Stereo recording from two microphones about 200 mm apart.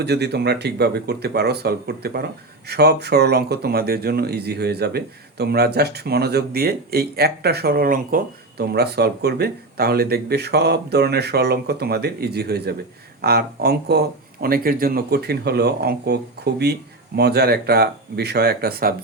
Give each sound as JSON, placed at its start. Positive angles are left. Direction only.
{"t": 0.0, "sound": "speech", "side_deg": -55}